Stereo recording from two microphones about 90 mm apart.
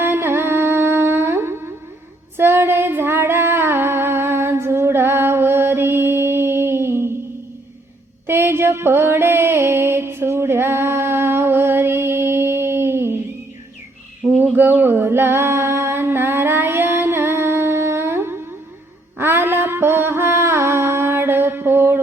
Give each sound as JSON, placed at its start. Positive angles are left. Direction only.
{"t": 0.0, "sound": "humming", "side_deg": -25}
{"t": 2.4, "sound": "female singing", "side_deg": -25}
{"t": 8.3, "sound": "a sound", "side_deg": -25}
{"t": 14.3, "sound": "music", "side_deg": -20}
{"t": 19.2, "sound": "mantra", "side_deg": -25}